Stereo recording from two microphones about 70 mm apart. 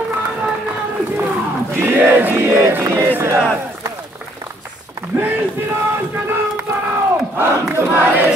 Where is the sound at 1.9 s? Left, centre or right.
Right.